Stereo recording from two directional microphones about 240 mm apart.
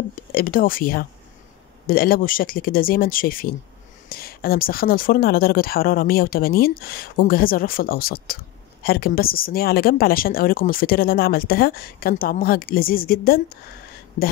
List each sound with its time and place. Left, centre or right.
0.3 s speech: left